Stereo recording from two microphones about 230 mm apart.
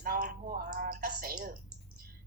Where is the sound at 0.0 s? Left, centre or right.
Right.